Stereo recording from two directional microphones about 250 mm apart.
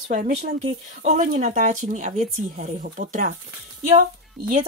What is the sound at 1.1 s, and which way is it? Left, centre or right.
Speech, right.